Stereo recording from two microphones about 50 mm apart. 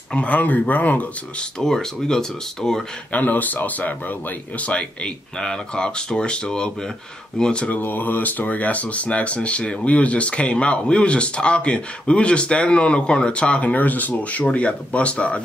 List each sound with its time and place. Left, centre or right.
0.1 s speech: left
1.6 s speech: centre
3.1 s speech: left
5.4 s speech: centre
7.6 s speech: left